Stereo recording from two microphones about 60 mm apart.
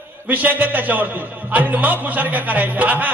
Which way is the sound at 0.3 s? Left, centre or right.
Right.